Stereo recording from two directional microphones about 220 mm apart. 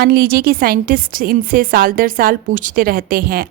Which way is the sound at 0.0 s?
45° right (ahead or behind).